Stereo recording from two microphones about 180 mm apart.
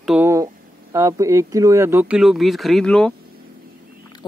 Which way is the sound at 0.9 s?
15° right (ahead or behind).